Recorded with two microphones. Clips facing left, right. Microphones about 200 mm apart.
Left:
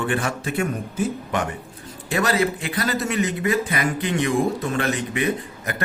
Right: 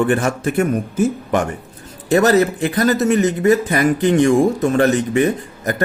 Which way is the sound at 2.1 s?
45° right (ahead or behind).